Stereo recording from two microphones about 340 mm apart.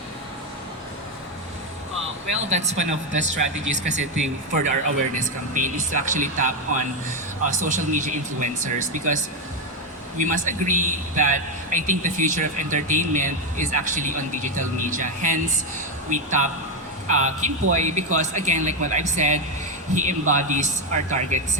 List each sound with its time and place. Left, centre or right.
2.5 s a man's voice: centre